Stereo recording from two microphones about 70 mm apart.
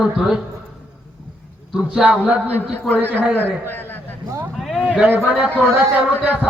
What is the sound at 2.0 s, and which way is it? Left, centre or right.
Speech, centre.